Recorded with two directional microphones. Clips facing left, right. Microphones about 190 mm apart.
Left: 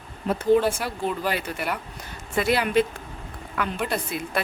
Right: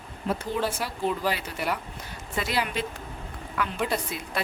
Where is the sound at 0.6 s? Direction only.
55° left (ahead or behind).